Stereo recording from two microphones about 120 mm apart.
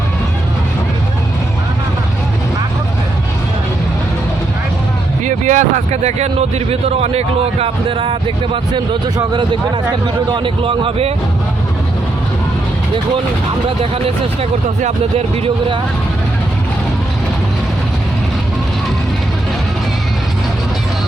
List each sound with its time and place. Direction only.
5.2 s a man's voice: 90° right; by 11.1 s 55° right (ahead or behind)